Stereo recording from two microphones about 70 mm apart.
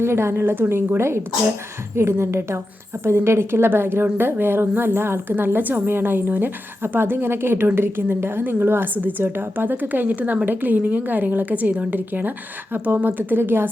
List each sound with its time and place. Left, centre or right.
0.0 s a woman's voice: right